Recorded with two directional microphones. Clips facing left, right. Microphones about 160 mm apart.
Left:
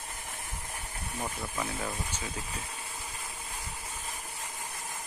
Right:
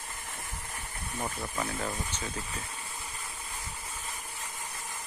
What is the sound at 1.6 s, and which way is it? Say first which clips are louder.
Speech: right 1 dB; 5° left (ahead or behind).